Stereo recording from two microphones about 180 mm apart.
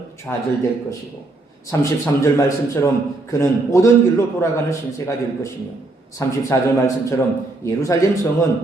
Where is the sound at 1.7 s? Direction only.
15° left (ahead or behind).